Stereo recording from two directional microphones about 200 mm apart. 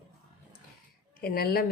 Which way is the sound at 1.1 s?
50° left (ahead or behind).